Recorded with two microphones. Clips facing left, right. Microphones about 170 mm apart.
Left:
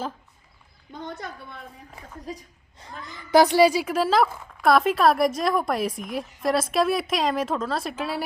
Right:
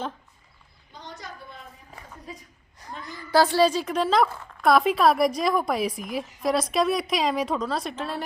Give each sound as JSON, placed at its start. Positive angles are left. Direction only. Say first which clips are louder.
{"t": 0.9, "sound": "a woman's voice", "louder": "left 5 dB", "side_deg": 55}
{"t": 2.7, "sound": "speech", "louder": "right 2 dB", "side_deg": 25}